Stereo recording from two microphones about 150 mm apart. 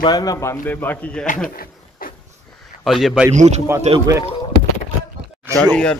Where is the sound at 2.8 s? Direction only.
Centre (ahead or behind).